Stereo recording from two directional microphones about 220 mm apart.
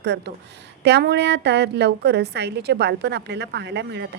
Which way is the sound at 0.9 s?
50° right (ahead or behind).